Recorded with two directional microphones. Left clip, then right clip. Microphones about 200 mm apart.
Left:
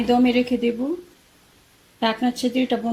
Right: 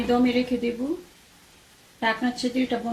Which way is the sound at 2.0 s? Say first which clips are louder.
Left 3 dB; 40° left (ahead or behind).